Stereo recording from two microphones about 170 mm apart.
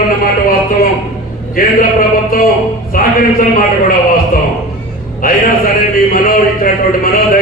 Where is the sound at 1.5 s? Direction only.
55° left (ahead or behind).